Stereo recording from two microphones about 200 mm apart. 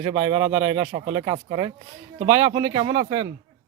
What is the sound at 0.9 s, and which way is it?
Speech, 30° right (ahead or behind).